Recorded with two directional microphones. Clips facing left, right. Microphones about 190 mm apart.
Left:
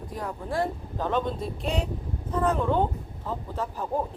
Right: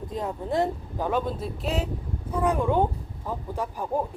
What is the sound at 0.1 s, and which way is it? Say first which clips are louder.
A man's voice: right 3 dB; 25° right (ahead or behind).